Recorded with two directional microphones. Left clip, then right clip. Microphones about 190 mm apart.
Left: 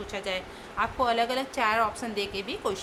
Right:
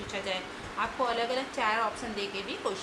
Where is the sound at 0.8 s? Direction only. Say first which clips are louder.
Left 4 dB; 45° left (ahead or behind).